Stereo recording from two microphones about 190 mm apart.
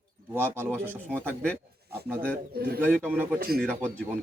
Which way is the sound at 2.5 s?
55° right (ahead or behind).